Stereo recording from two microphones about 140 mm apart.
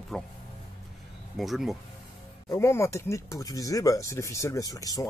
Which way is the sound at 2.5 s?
20° left (ahead or behind).